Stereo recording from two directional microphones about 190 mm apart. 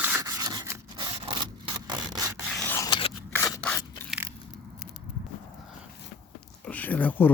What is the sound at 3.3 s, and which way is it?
Scissors, 20° left (ahead or behind).